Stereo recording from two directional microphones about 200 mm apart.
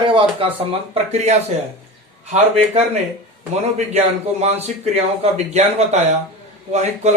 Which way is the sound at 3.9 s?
35° right (ahead or behind).